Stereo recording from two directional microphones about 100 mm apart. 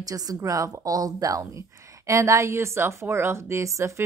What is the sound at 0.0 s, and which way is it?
A woman's voice, 40° right (ahead or behind).